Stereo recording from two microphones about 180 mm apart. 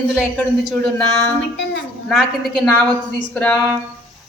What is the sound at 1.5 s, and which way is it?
Speech, 75° left (ahead or behind).